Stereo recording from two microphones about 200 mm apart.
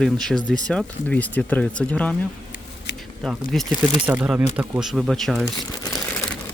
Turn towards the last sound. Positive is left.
turn(degrees=20)  # may be behind; listen again after turning